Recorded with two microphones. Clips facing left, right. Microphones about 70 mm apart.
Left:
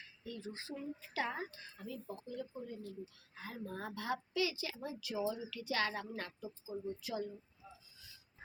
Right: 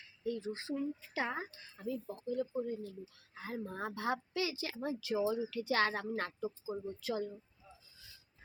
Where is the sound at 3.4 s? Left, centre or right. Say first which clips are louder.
Right 4 dB; right.